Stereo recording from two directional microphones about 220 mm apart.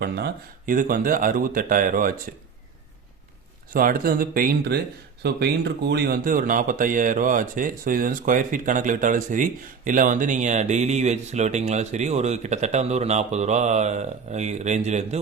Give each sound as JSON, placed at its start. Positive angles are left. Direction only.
{"t": 0.0, "sound": "speech", "side_deg": -45}
{"t": 3.7, "sound": "speech", "side_deg": -40}